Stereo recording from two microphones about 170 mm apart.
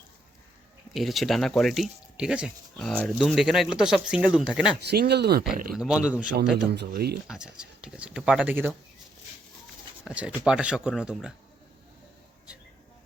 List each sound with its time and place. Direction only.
0.9 s speech: centre (ahead or behind)
4.8 s speech: 75° right (ahead or behind)
5.7 s speech: 5° right (ahead or behind)
6.9 s speech: 70° right (ahead or behind)
7.3 s speech: 5° right (ahead or behind)
10.0 s speech: 5° right (ahead or behind)